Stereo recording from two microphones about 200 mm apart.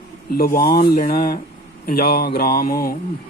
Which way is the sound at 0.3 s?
45° left (ahead or behind).